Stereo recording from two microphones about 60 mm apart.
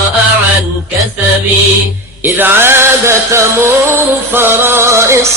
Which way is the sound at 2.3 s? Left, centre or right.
Right.